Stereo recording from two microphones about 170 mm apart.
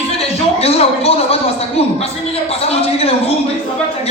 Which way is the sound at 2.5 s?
35° left (ahead or behind).